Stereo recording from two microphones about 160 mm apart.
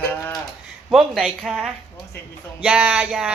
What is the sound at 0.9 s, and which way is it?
A woman's voice, centre (ahead or behind).